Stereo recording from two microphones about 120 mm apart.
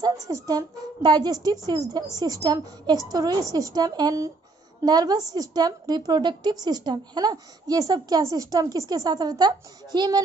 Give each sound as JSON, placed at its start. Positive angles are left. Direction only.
{"t": 0.0, "sound": "a woman's voice", "side_deg": -30}